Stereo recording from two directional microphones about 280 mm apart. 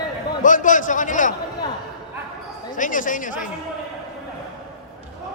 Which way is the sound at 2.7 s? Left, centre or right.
Left.